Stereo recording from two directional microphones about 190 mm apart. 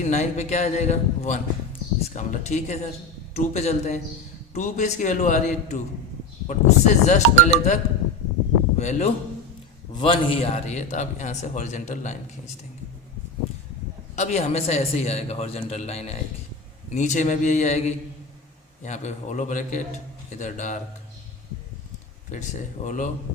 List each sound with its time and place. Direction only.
0.0 s a man's voice: 40° left (ahead or behind)
8.8 s a man's voice: 35° left (ahead or behind)
14.2 s a man's voice: 35° left (ahead or behind)
22.3 s a man's voice: 40° left (ahead or behind)